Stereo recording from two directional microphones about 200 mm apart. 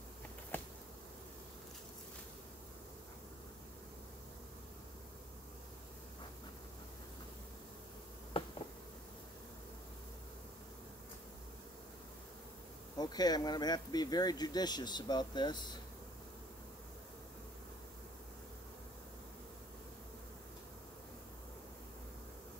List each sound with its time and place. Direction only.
8.3 s insect: 25° left (ahead or behind)
12.9 s speech: 20° left (ahead or behind)